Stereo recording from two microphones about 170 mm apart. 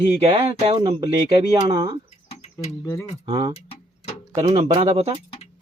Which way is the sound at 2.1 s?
40° left (ahead or behind).